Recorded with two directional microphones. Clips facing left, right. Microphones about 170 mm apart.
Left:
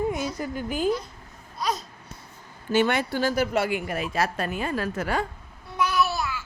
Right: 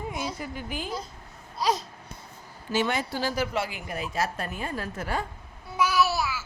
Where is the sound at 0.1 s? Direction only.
45° left (ahead or behind).